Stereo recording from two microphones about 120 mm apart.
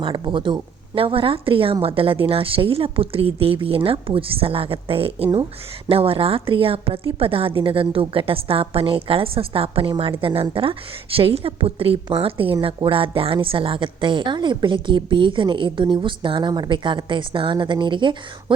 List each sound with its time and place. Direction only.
0.0 s a woman's voice: 40° right (ahead or behind)